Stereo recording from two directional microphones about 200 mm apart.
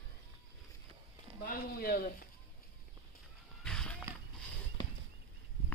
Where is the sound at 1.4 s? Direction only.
45° left (ahead or behind).